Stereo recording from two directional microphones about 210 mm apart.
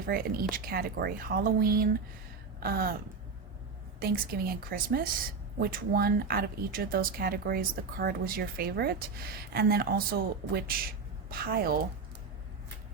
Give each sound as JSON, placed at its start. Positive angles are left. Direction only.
{"t": 0.0, "sound": "speech", "side_deg": -45}
{"t": 4.0, "sound": "speech", "side_deg": -45}